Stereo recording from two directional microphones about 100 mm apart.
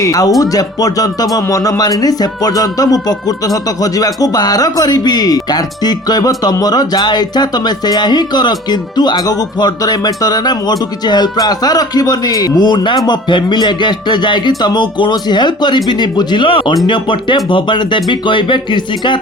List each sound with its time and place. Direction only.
0.0 s speech: 35° left (ahead or behind); by 19.2 s 55° left (ahead or behind)